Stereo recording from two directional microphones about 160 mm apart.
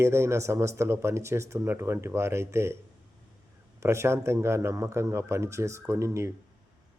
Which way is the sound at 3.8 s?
15° right (ahead or behind).